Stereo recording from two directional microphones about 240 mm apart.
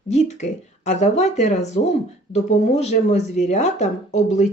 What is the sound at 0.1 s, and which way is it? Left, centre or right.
Speech, left.